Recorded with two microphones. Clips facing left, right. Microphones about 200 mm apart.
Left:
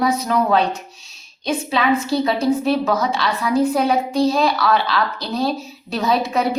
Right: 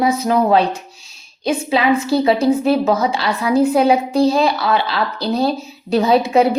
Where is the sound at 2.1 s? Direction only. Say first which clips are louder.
Right 4 dB; 30° right (ahead or behind).